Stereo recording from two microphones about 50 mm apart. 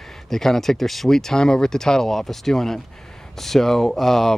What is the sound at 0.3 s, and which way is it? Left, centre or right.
Speech, centre.